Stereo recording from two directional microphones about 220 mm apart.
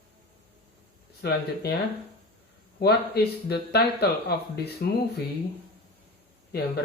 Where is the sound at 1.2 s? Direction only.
45° left (ahead or behind).